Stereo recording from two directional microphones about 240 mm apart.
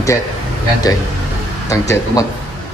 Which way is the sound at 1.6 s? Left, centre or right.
Centre.